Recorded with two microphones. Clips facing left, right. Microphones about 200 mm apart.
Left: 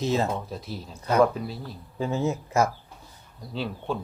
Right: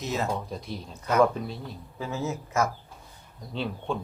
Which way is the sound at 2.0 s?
30° left (ahead or behind).